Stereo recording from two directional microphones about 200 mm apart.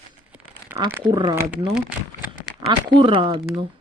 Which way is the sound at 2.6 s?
25° right (ahead or behind).